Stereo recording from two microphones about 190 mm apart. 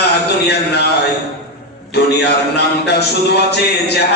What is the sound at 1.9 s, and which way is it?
Speech, 60° left (ahead or behind).